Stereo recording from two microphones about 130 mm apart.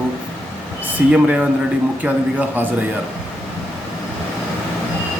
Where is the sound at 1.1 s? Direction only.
10° right (ahead or behind).